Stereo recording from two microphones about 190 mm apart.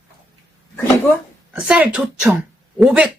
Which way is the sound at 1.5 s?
5° right (ahead or behind).